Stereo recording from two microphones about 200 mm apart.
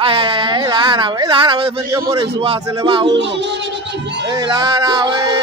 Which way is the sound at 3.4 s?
60° right (ahead or behind).